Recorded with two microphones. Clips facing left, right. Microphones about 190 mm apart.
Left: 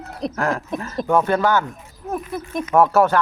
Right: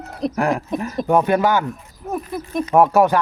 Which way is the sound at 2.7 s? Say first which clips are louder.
Right 1 dB; 15° right (ahead or behind).